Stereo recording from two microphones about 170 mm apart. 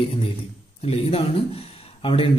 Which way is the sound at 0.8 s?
35° left (ahead or behind).